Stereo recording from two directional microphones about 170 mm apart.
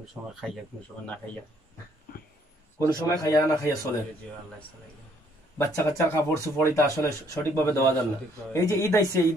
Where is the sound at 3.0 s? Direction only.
20° left (ahead or behind).